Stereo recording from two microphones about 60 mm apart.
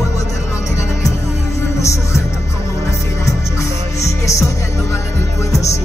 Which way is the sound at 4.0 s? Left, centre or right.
Left.